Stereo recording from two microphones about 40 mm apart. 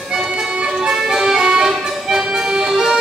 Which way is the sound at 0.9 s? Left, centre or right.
Centre.